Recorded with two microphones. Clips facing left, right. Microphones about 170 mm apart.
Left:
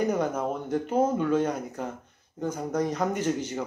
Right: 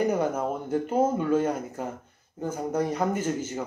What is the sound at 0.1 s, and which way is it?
Speech, 10° right (ahead or behind).